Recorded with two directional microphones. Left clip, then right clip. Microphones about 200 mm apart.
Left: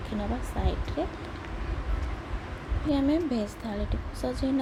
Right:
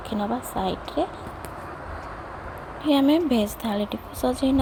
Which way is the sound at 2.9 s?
25° right (ahead or behind).